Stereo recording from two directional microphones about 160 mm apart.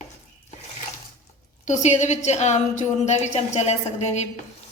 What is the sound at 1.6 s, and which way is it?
A woman's voice, 50° left (ahead or behind).